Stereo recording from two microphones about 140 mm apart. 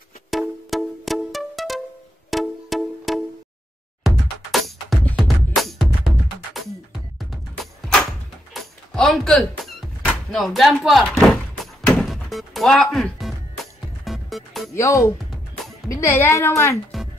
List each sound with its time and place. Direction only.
0.3 s music: centre (ahead or behind)
7.8 s a sound: 5° left (ahead or behind)
8.5 s door: centre (ahead or behind)
14.0 s music: centre (ahead or behind)
14.7 s a woman's voice: 20° left (ahead or behind)